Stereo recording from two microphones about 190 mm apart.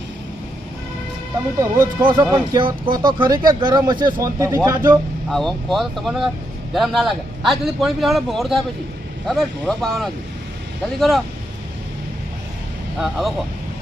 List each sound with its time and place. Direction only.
1.5 s speech: 20° right (ahead or behind)
5.3 s a man's voice: centre (ahead or behind)
13.0 s a man's voice: centre (ahead or behind)